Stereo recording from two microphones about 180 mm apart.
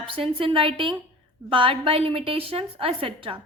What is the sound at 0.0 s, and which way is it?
A woman's voice, 30° right (ahead or behind).